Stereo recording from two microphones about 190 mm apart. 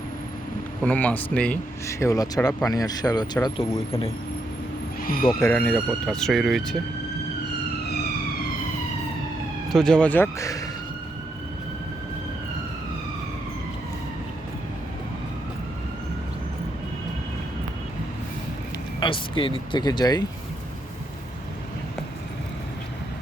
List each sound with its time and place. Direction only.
0.9 s speech: 10° left (ahead or behind)
5.4 s speech: 5° left (ahead or behind)
9.7 s speech: 5° left (ahead or behind)
18.9 s speech: 25° left (ahead or behind)